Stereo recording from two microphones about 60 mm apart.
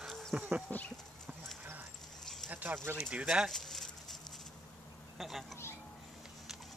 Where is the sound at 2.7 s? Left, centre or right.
Right.